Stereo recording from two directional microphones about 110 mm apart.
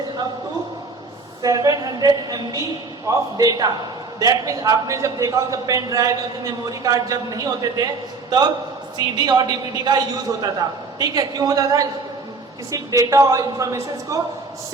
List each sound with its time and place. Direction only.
1.4 s a man's voice: 35° right (ahead or behind)
9.1 s a man's voice: 40° right (ahead or behind)